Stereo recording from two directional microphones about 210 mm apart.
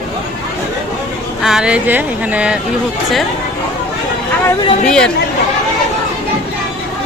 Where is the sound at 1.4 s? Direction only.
Centre (ahead or behind).